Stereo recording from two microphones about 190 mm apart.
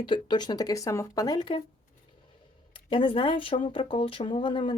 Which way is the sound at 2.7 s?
25° left (ahead or behind).